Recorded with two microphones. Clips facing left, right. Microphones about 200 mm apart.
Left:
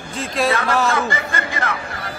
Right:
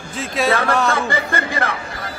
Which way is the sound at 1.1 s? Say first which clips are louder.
Right 3 dB; 30° right (ahead or behind).